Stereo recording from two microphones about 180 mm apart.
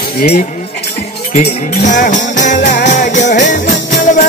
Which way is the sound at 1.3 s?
45° left (ahead or behind).